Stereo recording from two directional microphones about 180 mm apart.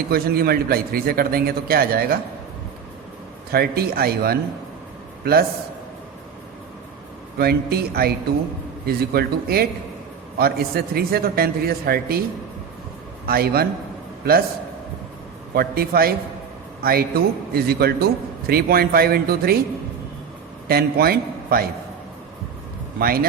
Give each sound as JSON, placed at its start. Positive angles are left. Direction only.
{"t": 0.1, "sound": "a man's voice", "side_deg": -60}
{"t": 3.5, "sound": "a man's voice", "side_deg": -60}
{"t": 7.3, "sound": "a man's voice", "side_deg": -60}
{"t": 13.2, "sound": "a man's voice", "side_deg": -55}
{"t": 15.5, "sound": "a man's voice", "side_deg": -55}
{"t": 20.7, "sound": "a man's voice", "side_deg": -60}
{"t": 23.0, "sound": "a man's voice", "side_deg": -55}